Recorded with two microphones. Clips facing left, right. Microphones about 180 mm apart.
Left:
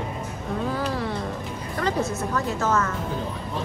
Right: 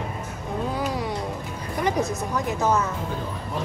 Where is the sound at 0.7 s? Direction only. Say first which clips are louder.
Even; 15° right (ahead or behind).